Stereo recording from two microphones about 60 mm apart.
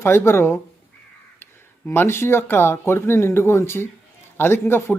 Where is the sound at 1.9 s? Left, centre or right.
Left.